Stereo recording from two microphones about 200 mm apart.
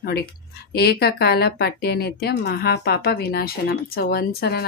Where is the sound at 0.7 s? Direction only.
50° left (ahead or behind).